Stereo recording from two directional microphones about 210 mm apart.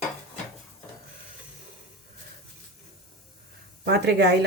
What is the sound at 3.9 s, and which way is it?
Speech, 50° right (ahead or behind).